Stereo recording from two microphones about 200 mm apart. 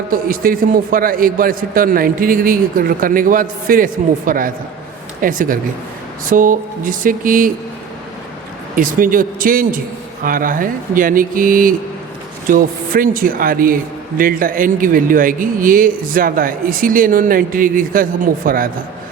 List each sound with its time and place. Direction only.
0.1 s speech: 45° right (ahead or behind)
6.2 s a sound: 40° right (ahead or behind)
8.7 s speech: 45° right (ahead or behind)